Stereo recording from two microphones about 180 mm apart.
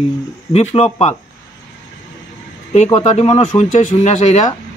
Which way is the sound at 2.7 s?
35° left (ahead or behind).